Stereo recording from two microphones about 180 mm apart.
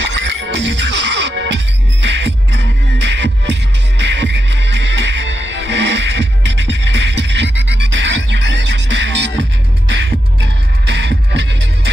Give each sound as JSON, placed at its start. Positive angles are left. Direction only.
{"t": 0.0, "sound": "music", "side_deg": -80}